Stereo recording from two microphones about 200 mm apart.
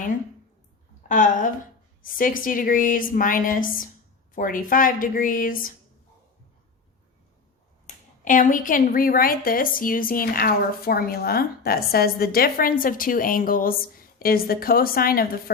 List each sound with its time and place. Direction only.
1.0 s a woman's voice: 40° left (ahead or behind)
7.9 s a woman's voice: 40° left (ahead or behind)